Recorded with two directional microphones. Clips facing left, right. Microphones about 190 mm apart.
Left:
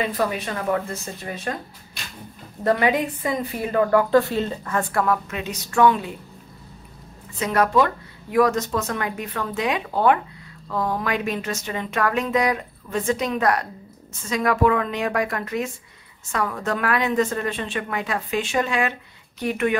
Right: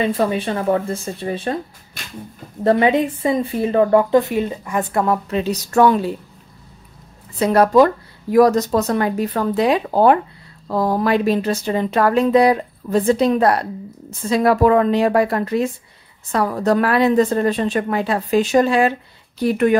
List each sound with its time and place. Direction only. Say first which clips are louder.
0.0 s a woman's voice: right 5 dB; 30° right (ahead or behind)
2.6 s a woman's voice: right 5 dB; 25° right (ahead or behind)
5.0 s a woman's voice: right 5 dB; 30° right (ahead or behind)
7.3 s a woman's voice: right 7 dB; 35° right (ahead or behind)